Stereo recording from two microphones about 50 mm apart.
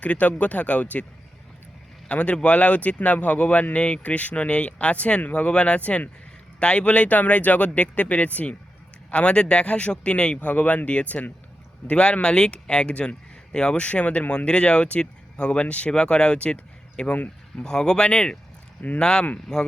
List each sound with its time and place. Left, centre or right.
0.0 s speech: left
2.0 s speech: left
13.8 s speech: left